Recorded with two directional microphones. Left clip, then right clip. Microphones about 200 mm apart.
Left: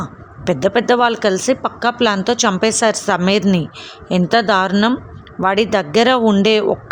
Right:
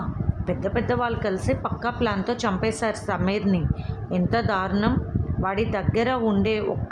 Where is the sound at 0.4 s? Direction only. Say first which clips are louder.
Left 11 dB; 50° left (ahead or behind).